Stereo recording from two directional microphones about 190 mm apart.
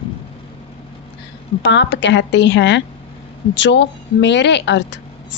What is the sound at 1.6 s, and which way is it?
A woman's voice, 70° left (ahead or behind).